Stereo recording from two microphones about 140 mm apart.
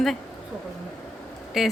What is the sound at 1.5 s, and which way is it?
Speech, 5° right (ahead or behind).